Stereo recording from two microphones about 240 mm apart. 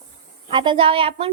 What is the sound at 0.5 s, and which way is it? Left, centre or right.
Speech, centre.